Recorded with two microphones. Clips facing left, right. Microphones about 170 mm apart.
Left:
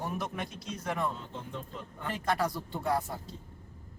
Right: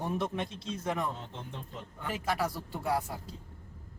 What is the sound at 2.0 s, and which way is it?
Speech, 5° right (ahead or behind).